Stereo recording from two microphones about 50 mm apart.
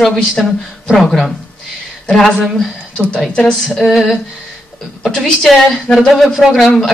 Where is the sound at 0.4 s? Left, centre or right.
Centre.